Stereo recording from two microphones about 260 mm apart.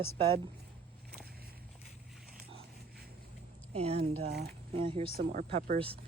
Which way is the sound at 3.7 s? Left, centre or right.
Right.